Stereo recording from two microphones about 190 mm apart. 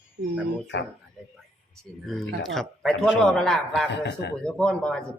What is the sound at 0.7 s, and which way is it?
Speech, 70° left (ahead or behind).